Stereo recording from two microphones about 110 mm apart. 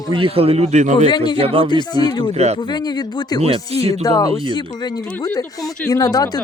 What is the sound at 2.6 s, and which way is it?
Speech, 40° left (ahead or behind).